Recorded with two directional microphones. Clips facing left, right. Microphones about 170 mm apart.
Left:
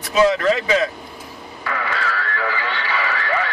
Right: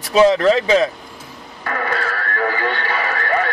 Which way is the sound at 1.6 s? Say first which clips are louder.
Right 2 dB; 45° right (ahead or behind).